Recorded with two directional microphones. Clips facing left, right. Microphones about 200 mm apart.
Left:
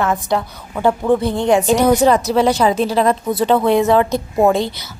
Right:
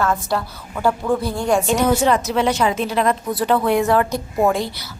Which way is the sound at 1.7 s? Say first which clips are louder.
Left 5 dB; 35° left (ahead or behind).